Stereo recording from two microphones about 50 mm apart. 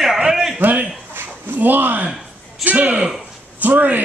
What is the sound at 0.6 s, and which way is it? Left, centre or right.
A woman's voice, right.